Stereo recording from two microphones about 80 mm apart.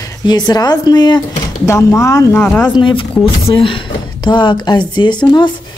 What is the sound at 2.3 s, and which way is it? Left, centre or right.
Speech, centre.